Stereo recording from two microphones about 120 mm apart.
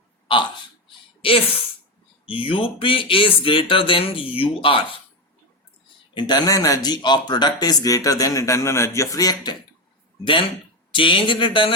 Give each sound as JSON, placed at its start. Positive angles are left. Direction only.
{"t": 1.2, "sound": "speech", "side_deg": 50}
{"t": 6.1, "sound": "speech", "side_deg": 35}
{"t": 10.9, "sound": "speech", "side_deg": 45}